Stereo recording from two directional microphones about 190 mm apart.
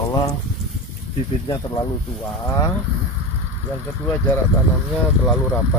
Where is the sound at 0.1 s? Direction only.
20° left (ahead or behind).